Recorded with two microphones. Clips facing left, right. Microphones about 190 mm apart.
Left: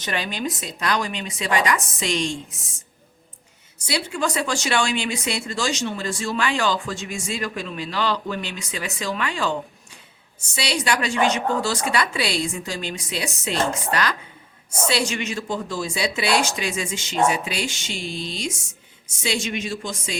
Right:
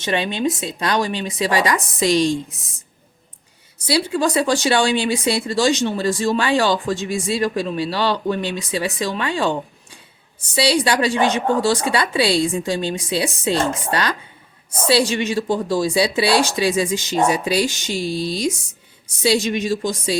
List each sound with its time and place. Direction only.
0.0 s speech: 25° right (ahead or behind)
3.8 s speech: 35° right (ahead or behind)